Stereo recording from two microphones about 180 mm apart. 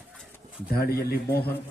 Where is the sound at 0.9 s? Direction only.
60° left (ahead or behind).